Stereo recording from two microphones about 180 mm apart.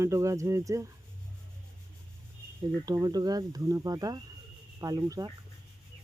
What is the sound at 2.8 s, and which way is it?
Speech, 20° right (ahead or behind).